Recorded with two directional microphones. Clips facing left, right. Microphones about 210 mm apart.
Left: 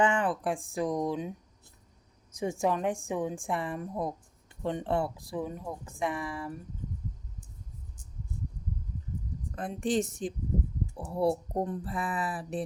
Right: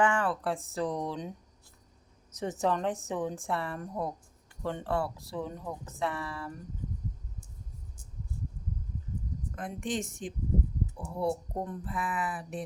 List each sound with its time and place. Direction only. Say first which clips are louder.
0.0 s speech: left 1 dB; 20° left (ahead or behind)
2.3 s speech: left 1 dB; 10° left (ahead or behind)
9.6 s speech: left 5 dB; 35° left (ahead or behind)